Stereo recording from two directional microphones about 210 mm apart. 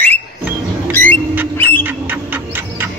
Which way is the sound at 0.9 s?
10° left (ahead or behind).